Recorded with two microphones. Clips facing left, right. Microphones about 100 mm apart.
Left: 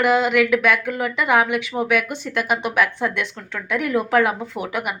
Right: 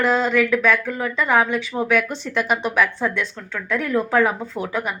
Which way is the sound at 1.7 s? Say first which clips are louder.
Even; 10° left (ahead or behind).